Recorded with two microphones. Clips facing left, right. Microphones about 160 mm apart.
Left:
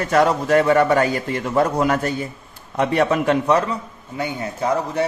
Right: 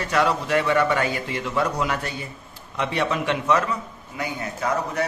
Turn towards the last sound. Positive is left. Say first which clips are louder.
# left 4 dB
turn(degrees=30)  # may be behind; listen again after turning